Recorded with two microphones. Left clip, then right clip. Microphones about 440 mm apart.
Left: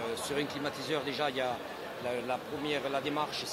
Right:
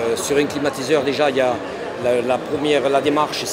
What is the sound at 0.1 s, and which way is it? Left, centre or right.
Speech, left.